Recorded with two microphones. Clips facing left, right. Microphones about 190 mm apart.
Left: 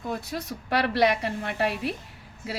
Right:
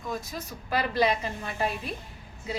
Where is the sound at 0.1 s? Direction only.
65° left (ahead or behind).